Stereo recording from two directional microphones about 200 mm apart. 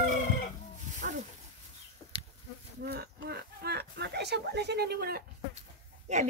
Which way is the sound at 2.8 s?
50° right (ahead or behind).